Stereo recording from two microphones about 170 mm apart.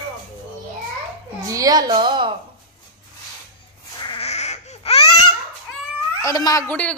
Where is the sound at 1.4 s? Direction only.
20° right (ahead or behind).